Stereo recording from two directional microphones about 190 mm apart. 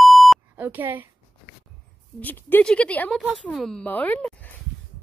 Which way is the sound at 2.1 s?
10° left (ahead or behind).